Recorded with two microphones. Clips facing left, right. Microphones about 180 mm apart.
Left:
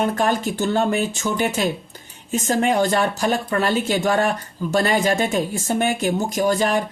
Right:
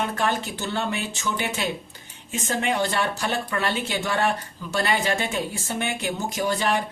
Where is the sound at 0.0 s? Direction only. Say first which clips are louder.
Left 5 dB; 40° left (ahead or behind).